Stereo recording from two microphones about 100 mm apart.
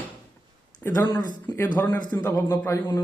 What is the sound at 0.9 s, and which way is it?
Speech, 45° left (ahead or behind).